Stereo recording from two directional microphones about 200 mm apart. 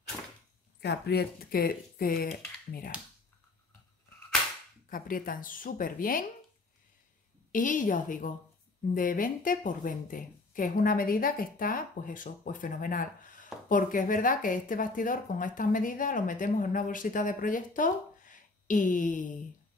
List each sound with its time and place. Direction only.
0.7 s a woman's voice: 55° left (ahead or behind)
4.8 s a woman's voice: 45° left (ahead or behind)
7.5 s a woman's voice: 40° left (ahead or behind)